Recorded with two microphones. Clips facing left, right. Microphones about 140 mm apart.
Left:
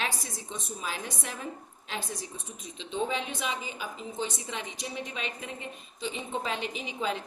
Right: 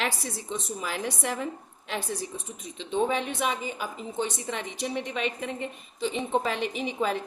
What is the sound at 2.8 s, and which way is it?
A woman's voice, 60° right (ahead or behind).